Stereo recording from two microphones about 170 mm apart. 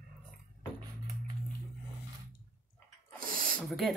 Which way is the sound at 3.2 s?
55° right (ahead or behind).